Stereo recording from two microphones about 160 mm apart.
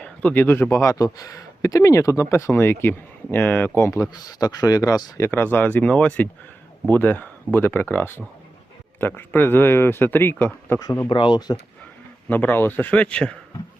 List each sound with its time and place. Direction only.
0.0 s speech: 10° left (ahead or behind); by 11.5 s 25° left (ahead or behind)
12.3 s speech: 10° left (ahead or behind)